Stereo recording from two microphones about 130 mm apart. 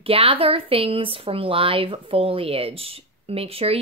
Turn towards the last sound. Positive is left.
turn(degrees=-50)  # may be behind; listen again after turning